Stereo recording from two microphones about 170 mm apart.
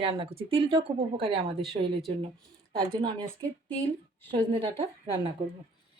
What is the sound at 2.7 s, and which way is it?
Speech, 25° right (ahead or behind).